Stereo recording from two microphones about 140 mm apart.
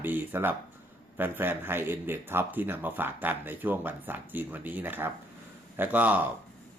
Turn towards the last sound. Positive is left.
turn(degrees=-10)  # may be behind; listen again after turning